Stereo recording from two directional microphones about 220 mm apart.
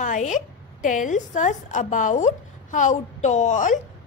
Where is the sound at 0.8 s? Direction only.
35° left (ahead or behind).